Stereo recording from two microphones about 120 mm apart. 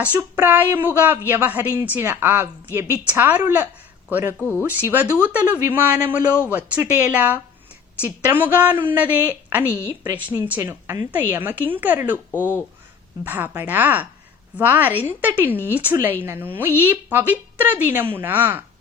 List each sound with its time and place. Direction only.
0.0 s a woman's voice: 15° right (ahead or behind)